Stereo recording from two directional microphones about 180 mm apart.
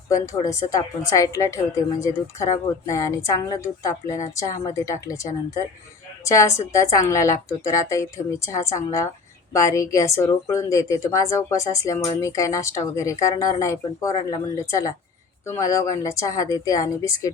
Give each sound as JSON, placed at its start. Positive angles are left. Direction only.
{"t": 0.1, "sound": "a woman's voice", "side_deg": 20}
{"t": 6.2, "sound": "a woman's voice", "side_deg": 15}